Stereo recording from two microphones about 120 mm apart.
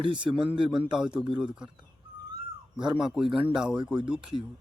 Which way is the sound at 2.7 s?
5° right (ahead or behind).